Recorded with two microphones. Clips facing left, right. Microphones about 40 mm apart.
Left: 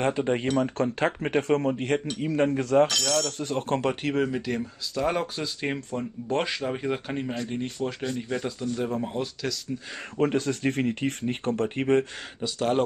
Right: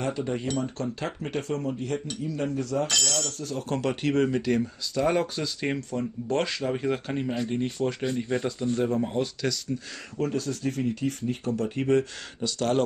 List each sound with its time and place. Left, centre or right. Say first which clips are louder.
0.0 s speech: left 4 dB; left
4.0 s speech: right 2 dB; centre
10.1 s speech: left 4 dB; left
12.4 s speech: even; centre